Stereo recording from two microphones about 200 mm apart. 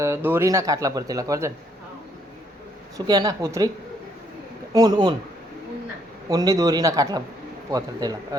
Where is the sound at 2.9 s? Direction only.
20° right (ahead or behind).